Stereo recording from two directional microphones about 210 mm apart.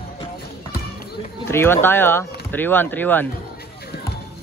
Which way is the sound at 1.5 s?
10° left (ahead or behind).